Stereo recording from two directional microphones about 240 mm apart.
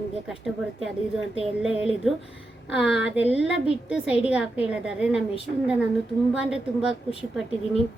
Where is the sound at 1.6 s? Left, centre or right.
Centre.